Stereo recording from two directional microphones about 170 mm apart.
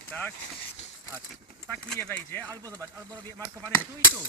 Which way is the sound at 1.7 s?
10° left (ahead or behind).